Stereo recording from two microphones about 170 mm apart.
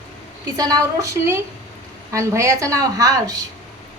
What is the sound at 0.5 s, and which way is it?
A woman's voice, 20° right (ahead or behind).